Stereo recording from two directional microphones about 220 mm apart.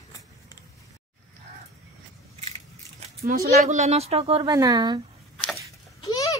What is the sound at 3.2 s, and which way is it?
Speech, 45° right (ahead or behind).